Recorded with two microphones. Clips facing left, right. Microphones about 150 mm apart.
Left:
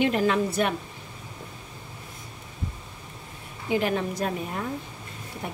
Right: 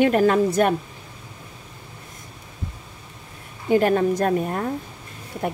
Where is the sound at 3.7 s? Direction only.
45° right (ahead or behind).